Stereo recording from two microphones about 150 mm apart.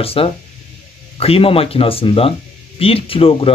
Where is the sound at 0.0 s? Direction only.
40° left (ahead or behind).